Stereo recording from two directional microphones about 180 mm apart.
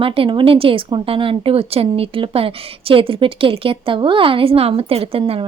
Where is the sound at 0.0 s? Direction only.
30° right (ahead or behind).